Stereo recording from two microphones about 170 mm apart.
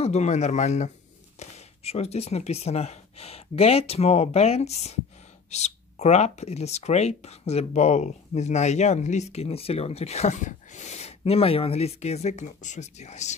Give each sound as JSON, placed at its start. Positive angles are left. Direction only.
{"t": 0.0, "sound": "speech", "side_deg": 40}